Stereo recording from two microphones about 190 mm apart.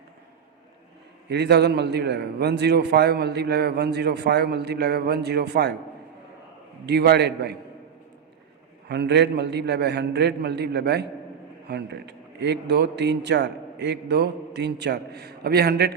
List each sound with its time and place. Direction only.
1.3 s a man's voice: 60° right (ahead or behind)
6.8 s a man's voice: 60° right (ahead or behind)
8.9 s a man's voice: 60° right (ahead or behind)